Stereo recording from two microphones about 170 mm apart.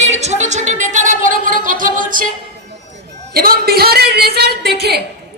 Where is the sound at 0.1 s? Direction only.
40° right (ahead or behind).